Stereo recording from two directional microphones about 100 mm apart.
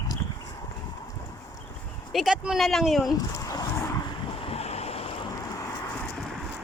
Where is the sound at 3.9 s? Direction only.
55° left (ahead or behind); by 5.1 s 90° left.